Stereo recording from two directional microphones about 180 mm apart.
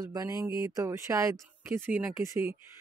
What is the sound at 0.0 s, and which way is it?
Speech, 20° right (ahead or behind).